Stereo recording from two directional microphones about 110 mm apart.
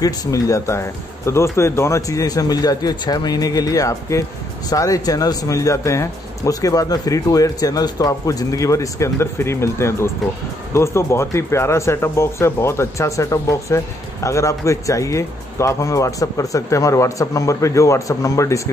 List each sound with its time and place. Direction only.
0.0 s speech: 35° left (ahead or behind)